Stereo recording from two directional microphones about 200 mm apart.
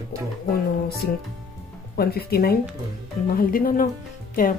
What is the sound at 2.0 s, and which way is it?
Speech, 50° left (ahead or behind).